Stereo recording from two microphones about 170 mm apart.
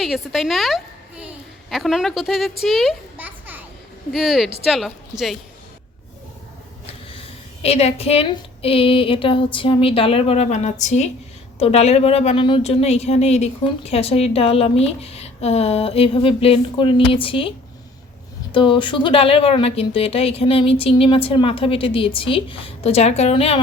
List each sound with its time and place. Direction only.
0.0 s a child's voice: centre (ahead or behind)
7.6 s a woman's voice: 35° left (ahead or behind)
18.5 s a woman's voice: 30° left (ahead or behind)